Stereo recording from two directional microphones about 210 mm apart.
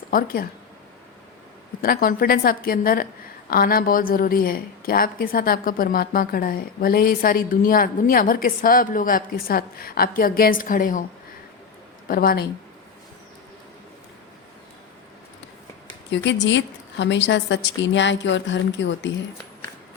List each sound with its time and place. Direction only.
0.1 s a woman's voice: 45° left (ahead or behind)
1.8 s a woman's voice: 45° left (ahead or behind)
12.0 s a woman's voice: 45° left (ahead or behind)
16.0 s a woman's voice: 60° left (ahead or behind)